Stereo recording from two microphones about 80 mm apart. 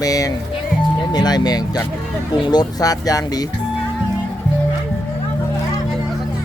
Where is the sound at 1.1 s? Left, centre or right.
Left.